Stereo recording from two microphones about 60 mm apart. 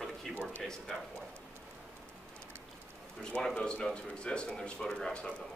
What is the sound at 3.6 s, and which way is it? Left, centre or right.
A man's voice, centre.